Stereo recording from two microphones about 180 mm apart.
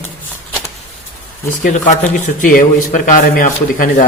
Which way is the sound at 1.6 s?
45° left (ahead or behind).